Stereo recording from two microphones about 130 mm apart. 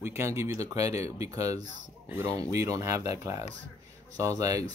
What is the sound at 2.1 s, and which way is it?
Speech, 20° right (ahead or behind).